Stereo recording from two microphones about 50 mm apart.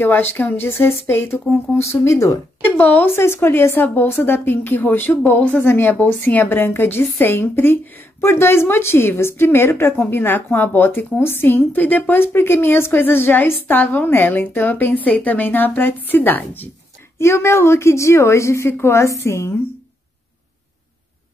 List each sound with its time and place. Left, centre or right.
0.0 s a woman's voice: left
1.8 s a woman's voice: left
2.8 s a woman's voice: left
3.2 s a woman's voice: left
5.6 s a woman's voice: left
8.2 s a woman's voice: left
15.0 s a woman's voice: left
17.2 s a woman's voice: left
18.7 s a woman's voice: left